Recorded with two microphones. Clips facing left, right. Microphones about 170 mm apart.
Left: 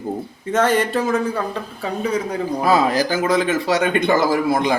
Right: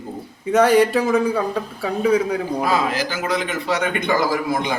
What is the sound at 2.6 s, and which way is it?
A man's voice, 40° left (ahead or behind).